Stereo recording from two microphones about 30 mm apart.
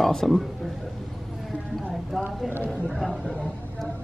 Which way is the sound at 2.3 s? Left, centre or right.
Right.